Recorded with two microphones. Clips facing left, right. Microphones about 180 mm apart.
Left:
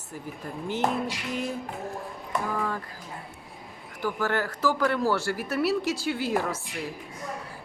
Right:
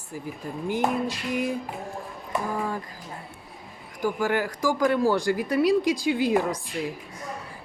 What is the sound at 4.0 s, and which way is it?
Speech, 15° right (ahead or behind).